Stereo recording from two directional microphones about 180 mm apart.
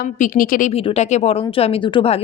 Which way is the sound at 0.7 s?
35° left (ahead or behind).